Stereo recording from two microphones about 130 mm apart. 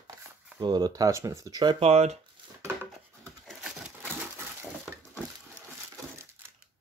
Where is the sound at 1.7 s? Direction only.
50° right (ahead or behind).